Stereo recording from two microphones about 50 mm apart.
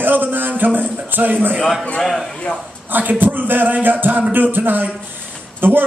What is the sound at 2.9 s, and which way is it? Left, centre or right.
A man's voice, right.